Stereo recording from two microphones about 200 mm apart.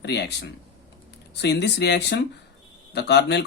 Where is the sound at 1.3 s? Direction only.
60° left (ahead or behind).